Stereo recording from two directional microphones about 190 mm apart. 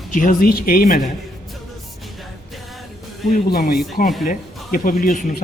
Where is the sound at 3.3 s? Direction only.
55° left (ahead or behind).